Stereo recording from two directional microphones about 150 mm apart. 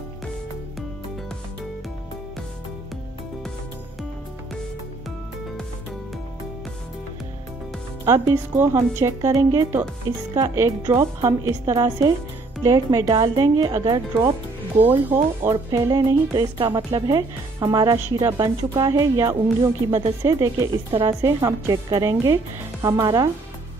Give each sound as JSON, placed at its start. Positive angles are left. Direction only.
{"t": 8.0, "sound": "a woman's voice", "side_deg": -20}
{"t": 14.9, "sound": "speech", "side_deg": -10}
{"t": 15.5, "sound": "a woman's voice", "side_deg": -25}